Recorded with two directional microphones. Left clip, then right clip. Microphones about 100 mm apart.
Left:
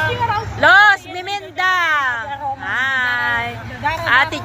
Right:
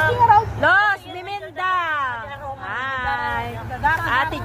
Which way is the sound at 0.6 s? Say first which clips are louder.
Left 6 dB; 10° left (ahead or behind).